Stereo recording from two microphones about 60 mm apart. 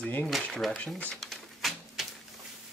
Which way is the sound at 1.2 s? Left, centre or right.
Centre.